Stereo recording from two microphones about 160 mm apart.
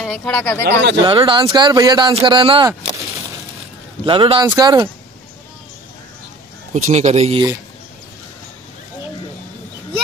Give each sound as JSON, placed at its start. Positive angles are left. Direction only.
{"t": 0.0, "sound": "speech", "side_deg": 5}
{"t": 1.0, "sound": "speech", "side_deg": -30}
{"t": 4.0, "sound": "speech", "side_deg": -30}
{"t": 6.7, "sound": "a man's voice", "side_deg": -45}